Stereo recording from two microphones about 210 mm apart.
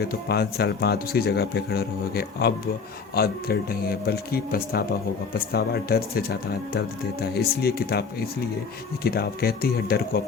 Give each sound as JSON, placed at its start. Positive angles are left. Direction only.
{"t": 0.0, "sound": "speech", "side_deg": 50}